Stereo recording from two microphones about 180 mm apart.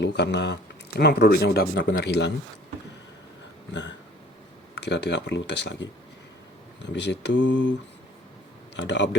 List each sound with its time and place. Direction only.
0.0 s speech: 70° left (ahead or behind)
3.7 s a sound: 80° left
4.8 s speech: 70° left (ahead or behind); by 7.7 s 90° left
8.7 s speech: 85° left